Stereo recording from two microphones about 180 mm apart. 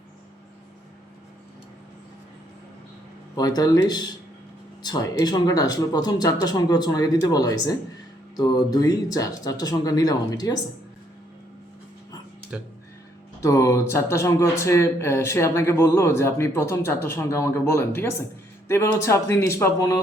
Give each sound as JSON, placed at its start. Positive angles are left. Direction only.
{"t": 3.3, "sound": "speech", "side_deg": 20}
{"t": 13.4, "sound": "speech", "side_deg": 20}